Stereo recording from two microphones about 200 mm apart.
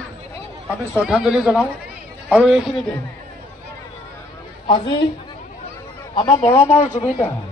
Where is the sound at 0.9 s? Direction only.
5° right (ahead or behind).